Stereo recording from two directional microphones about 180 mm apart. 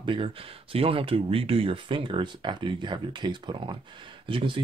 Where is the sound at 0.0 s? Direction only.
30° right (ahead or behind).